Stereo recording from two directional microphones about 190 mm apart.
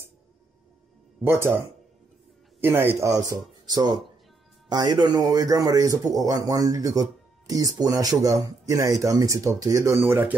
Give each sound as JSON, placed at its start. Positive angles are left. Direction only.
{"t": 1.2, "sound": "speech", "side_deg": -10}